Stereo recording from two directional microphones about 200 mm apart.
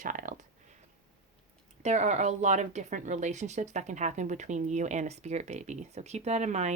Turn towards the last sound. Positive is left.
turn(degrees=-35)  # may be behind; listen again after turning